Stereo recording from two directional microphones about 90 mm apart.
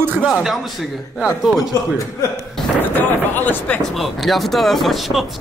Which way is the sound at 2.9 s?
20° left (ahead or behind).